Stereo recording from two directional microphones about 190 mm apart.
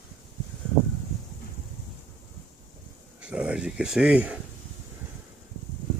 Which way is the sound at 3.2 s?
5° right (ahead or behind).